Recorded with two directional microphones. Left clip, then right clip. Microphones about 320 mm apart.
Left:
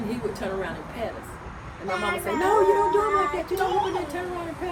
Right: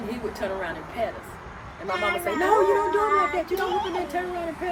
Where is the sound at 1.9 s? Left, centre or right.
Centre.